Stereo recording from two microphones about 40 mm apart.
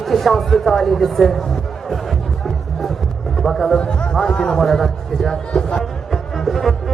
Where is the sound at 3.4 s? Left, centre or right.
Centre.